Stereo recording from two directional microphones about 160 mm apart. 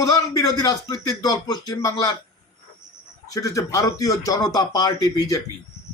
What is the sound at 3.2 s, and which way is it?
Speech, 20° left (ahead or behind).